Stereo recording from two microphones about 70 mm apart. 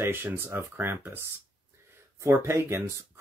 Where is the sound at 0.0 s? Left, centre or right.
Right.